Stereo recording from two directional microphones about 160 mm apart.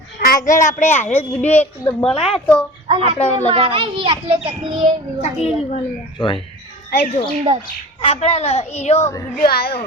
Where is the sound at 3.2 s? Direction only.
45° left (ahead or behind).